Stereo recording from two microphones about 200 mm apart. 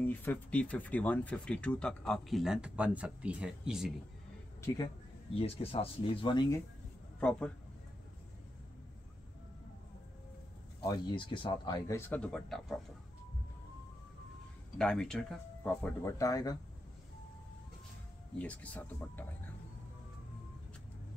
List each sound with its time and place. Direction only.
0.0 s speech: 10° left (ahead or behind)
5.3 s speech: 30° left (ahead or behind)
7.2 s speech: 5° left (ahead or behind)
10.8 s speech: 20° left (ahead or behind); by 12.7 s centre (ahead or behind)
14.8 s speech: 5° left (ahead or behind)
18.4 s speech: 5° left (ahead or behind)